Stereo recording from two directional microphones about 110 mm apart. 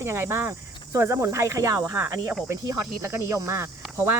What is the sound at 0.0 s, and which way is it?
Speech, 20° right (ahead or behind).